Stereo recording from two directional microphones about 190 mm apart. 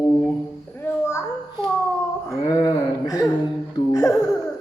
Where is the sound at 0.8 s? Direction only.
15° left (ahead or behind).